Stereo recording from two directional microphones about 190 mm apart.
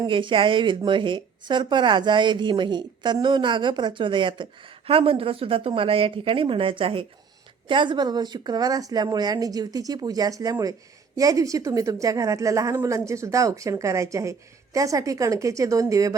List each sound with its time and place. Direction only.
0.0 s a woman's voice: 25° right (ahead or behind)